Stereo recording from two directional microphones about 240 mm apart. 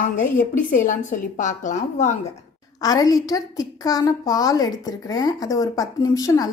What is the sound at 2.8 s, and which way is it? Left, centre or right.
A woman's voice, centre.